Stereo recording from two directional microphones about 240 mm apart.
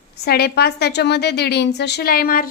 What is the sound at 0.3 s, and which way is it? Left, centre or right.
A woman's voice, left.